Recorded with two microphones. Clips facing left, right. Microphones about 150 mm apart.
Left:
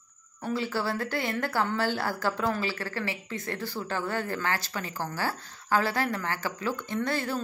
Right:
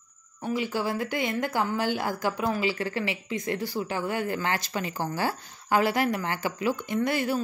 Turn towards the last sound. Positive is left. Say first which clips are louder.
# right 3 dB
turn(degrees=-15)  # may be behind; listen again after turning